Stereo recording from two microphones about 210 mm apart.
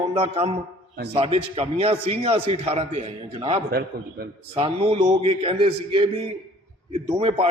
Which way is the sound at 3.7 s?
45° right (ahead or behind).